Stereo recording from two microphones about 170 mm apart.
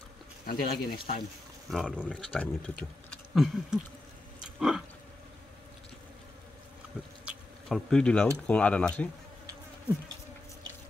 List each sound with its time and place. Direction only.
0.5 s speech: 60° left (ahead or behind)
1.7 s speech: 5° left (ahead or behind)
3.3 s a sound: centre (ahead or behind)
7.2 s bee: centre (ahead or behind)
8.5 s speech: 10° left (ahead or behind)